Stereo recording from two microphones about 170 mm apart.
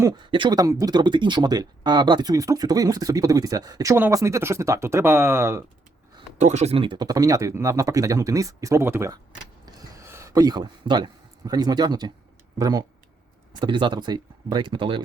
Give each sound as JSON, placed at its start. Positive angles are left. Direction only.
{"t": 0.0, "sound": "speech", "side_deg": -25}
{"t": 6.4, "sound": "speech", "side_deg": -40}
{"t": 9.6, "sound": "a sound", "side_deg": -20}
{"t": 12.5, "sound": "speech", "side_deg": -20}